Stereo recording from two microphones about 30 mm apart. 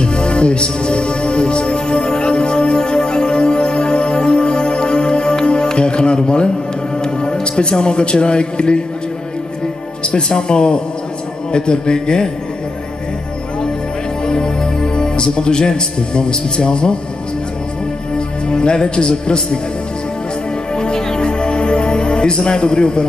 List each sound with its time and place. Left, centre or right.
0.0 s music: left
7.5 s a man's voice: left
10.1 s speech: left
14.2 s speech: left
18.1 s speech: left
20.7 s music: left